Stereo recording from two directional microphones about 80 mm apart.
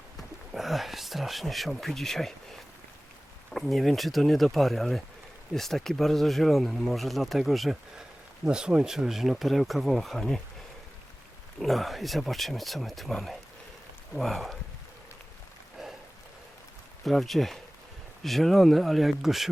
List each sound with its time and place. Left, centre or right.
0.2 s speech: centre
3.5 s speech: centre
11.6 s speech: centre
15.8 s rain: centre
17.0 s speech: centre